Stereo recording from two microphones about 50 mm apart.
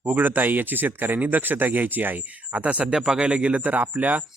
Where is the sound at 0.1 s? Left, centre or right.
Right.